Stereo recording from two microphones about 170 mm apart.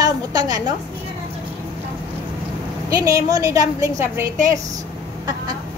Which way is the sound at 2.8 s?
20° right (ahead or behind).